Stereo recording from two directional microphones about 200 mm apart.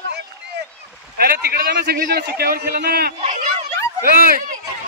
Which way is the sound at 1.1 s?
50° right (ahead or behind).